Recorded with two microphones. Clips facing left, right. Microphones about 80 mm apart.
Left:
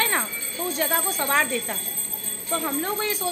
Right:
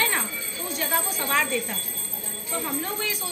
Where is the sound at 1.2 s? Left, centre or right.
Left.